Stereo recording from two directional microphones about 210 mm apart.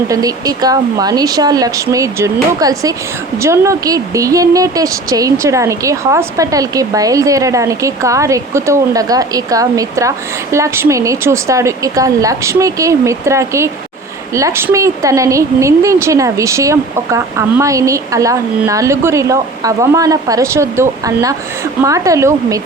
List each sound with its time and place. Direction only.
0.1 s a woman's voice: 15° right (ahead or behind)